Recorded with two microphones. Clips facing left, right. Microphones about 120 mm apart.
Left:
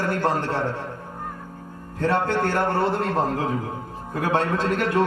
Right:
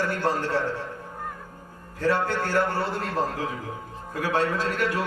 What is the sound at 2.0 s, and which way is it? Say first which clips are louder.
A man's voice: left 3 dB; 55° left (ahead or behind).